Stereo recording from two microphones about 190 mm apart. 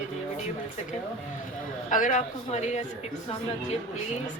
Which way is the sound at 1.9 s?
45° left (ahead or behind).